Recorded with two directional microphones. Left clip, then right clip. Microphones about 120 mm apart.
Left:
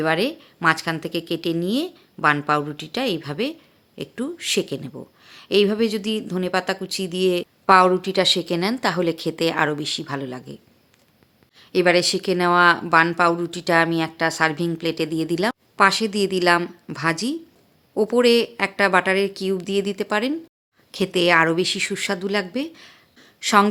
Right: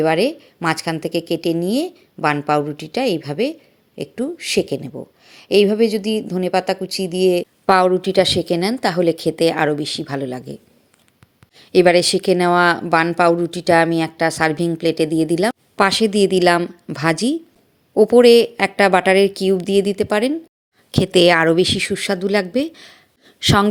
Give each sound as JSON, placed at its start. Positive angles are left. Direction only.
{"t": 0.0, "sound": "a woman's voice", "side_deg": -25}
{"t": 7.7, "sound": "a woman's voice", "side_deg": -35}
{"t": 15.7, "sound": "a woman's voice", "side_deg": -40}
{"t": 16.6, "sound": "speech", "side_deg": -20}
{"t": 16.9, "sound": "a woman's voice", "side_deg": -40}
{"t": 20.9, "sound": "a woman's voice", "side_deg": -50}